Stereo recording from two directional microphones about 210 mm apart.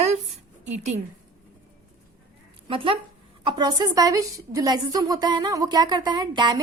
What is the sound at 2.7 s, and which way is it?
A woman's voice, 25° right (ahead or behind).